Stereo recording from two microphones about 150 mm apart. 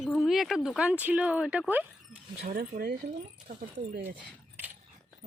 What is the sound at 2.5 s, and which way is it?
Speech, 85° right.